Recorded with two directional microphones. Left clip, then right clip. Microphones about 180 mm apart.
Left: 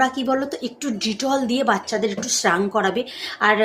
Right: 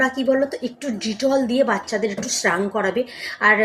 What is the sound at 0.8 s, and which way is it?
A woman's voice, 20° left (ahead or behind).